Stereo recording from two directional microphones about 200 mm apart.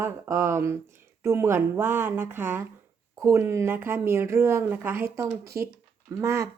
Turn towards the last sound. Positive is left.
turn(degrees=-15)  # may be behind; listen again after turning